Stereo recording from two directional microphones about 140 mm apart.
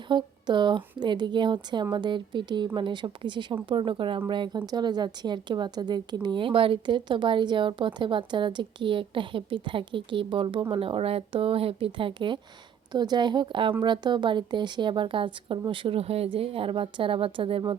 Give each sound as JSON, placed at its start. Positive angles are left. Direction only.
{"t": 0.1, "sound": "speech", "side_deg": -35}